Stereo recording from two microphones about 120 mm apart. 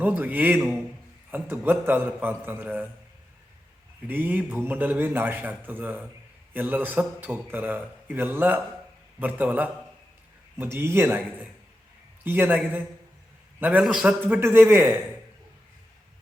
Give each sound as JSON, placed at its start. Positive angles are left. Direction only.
{"t": 0.0, "sound": "a man's voice", "side_deg": -15}
{"t": 4.0, "sound": "a man's voice", "side_deg": -15}